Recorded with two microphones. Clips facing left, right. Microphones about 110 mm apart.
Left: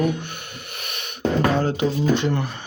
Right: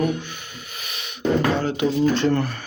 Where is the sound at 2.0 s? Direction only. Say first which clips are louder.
Right 2 dB; 15° left (ahead or behind).